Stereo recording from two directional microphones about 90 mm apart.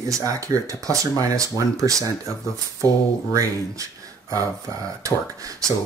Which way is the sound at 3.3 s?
40° right (ahead or behind).